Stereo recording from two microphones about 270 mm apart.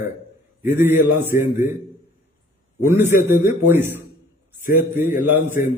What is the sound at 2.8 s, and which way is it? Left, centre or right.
A man's voice, centre.